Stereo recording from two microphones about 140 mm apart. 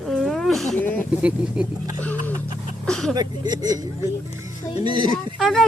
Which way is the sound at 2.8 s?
5° left (ahead or behind).